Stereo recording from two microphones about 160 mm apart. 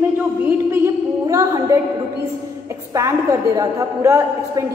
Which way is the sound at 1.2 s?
20° right (ahead or behind).